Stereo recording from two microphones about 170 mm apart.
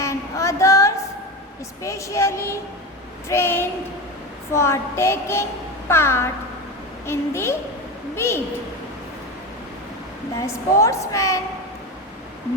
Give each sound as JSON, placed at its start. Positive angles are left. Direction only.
{"t": 0.0, "sound": "a sound", "side_deg": 15}
{"t": 1.8, "sound": "a woman's voice", "side_deg": 15}
{"t": 10.4, "sound": "a woman's voice", "side_deg": 20}